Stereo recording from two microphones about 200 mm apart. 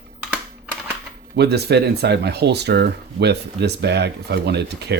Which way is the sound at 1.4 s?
55° right (ahead or behind).